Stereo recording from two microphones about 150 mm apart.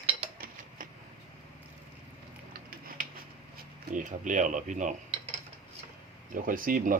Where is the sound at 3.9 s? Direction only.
60° right (ahead or behind).